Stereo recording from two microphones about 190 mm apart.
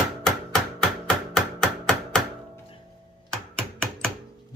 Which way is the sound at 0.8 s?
5° left (ahead or behind).